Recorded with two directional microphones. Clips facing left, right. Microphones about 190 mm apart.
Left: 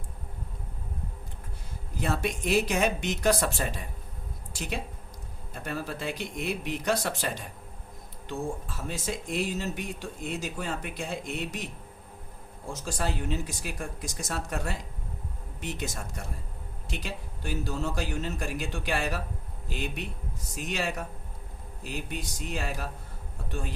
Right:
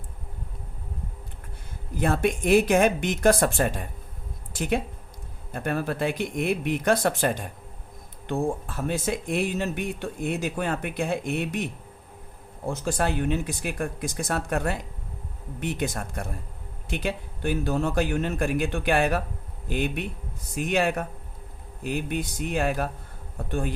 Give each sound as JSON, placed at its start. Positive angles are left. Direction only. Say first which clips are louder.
{"t": 2.0, "sound": "speech", "louder": "right 6 dB", "side_deg": -55}